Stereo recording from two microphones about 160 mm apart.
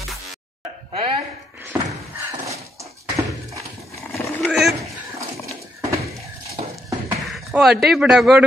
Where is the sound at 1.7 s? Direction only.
15° right (ahead or behind).